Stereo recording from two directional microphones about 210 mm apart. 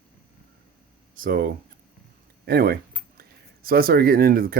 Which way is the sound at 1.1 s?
45° right (ahead or behind).